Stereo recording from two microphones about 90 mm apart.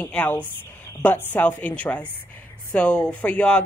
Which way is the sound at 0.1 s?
15° left (ahead or behind).